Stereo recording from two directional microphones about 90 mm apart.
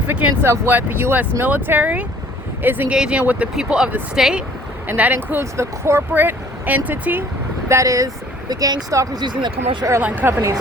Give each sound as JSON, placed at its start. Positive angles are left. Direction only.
{"t": 0.1, "sound": "speech", "side_deg": -20}
{"t": 2.9, "sound": "speech", "side_deg": -10}
{"t": 4.9, "sound": "speech", "side_deg": -20}
{"t": 7.7, "sound": "speech", "side_deg": -35}
{"t": 9.2, "sound": "speech", "side_deg": -60}
{"t": 10.0, "sound": "speech", "side_deg": -15}